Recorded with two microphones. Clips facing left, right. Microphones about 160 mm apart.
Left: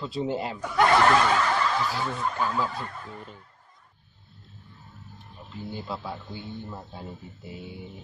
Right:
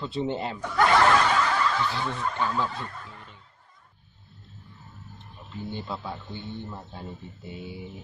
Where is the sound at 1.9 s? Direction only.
5° left (ahead or behind).